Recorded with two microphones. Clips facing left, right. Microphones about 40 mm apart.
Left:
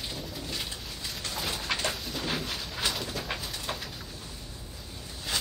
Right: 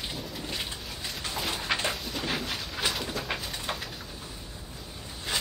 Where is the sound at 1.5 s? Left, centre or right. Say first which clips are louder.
Right 2 dB; centre.